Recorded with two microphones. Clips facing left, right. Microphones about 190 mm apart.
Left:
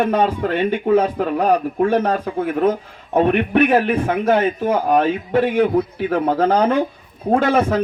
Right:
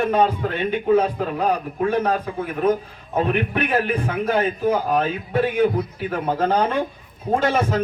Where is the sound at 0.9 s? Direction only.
50° left (ahead or behind).